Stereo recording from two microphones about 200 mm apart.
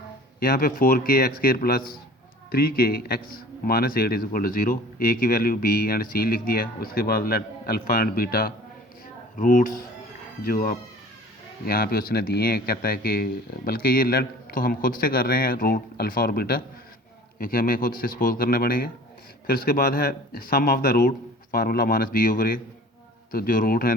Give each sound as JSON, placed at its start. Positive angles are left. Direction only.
{"t": 0.3, "sound": "a man's voice", "side_deg": 50}